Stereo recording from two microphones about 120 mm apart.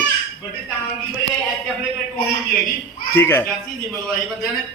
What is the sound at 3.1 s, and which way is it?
Speech, 20° left (ahead or behind).